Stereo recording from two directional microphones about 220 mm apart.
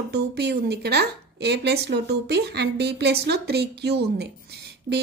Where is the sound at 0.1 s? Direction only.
50° right (ahead or behind).